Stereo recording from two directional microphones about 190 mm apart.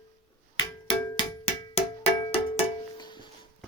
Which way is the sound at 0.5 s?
25° left (ahead or behind).